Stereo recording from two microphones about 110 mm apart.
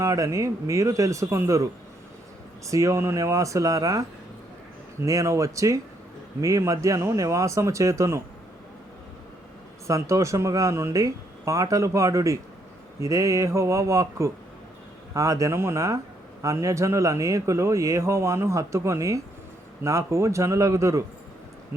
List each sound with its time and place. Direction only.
0.0 s a man's voice: 30° right (ahead or behind)
9.8 s a man's voice: 25° right (ahead or behind)